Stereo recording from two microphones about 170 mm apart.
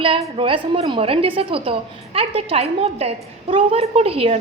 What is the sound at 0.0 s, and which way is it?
A woman's voice, 30° right (ahead or behind).